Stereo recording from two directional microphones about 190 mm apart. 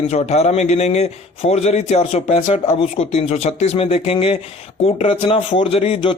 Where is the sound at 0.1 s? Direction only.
35° left (ahead or behind).